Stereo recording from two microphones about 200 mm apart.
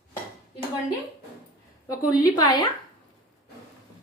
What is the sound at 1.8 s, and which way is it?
Speech, 20° left (ahead or behind).